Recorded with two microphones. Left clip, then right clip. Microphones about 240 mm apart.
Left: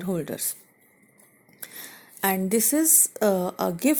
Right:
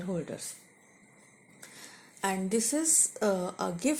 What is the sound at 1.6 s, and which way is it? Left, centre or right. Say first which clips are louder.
A woman's voice: left 7 dB; left.